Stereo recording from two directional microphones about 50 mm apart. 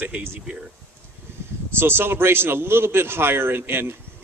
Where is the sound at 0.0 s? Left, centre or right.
Right.